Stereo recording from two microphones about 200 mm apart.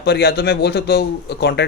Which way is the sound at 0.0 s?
55° left (ahead or behind).